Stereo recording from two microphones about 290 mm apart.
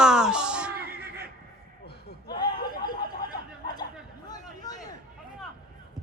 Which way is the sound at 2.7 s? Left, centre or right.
Centre.